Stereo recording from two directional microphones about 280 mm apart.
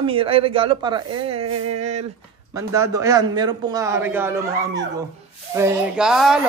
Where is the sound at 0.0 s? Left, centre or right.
Centre.